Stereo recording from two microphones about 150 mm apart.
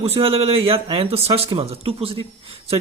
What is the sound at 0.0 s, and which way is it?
A man's voice, 40° right (ahead or behind).